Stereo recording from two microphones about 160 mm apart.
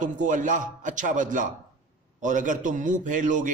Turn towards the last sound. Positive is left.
turn(degrees=-55)  # may be behind; listen again after turning